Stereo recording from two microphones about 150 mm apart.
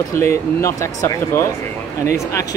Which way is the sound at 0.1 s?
20° left (ahead or behind).